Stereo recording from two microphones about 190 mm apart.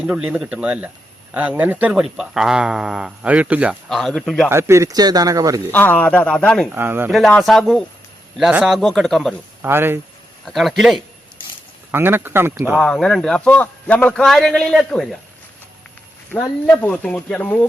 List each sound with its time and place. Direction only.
0.0 s a man's voice: 5° right (ahead or behind)
4.4 s a man's voice: 15° right (ahead or behind)
5.7 s speech: 10° left (ahead or behind)
6.7 s a man's voice: 10° right (ahead or behind)
7.1 s speech: centre (ahead or behind)
9.6 s speech: 10° right (ahead or behind)
10.4 s speech: centre (ahead or behind)
11.9 s a man's voice: 10° right (ahead or behind)
12.8 s speech: 5° left (ahead or behind)
16.3 s speech: 10° left (ahead or behind)